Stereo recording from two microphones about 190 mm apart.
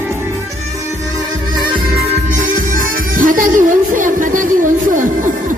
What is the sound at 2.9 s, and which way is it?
Music, 45° right (ahead or behind).